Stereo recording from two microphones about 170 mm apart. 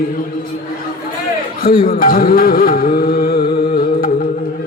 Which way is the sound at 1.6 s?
60° left (ahead or behind).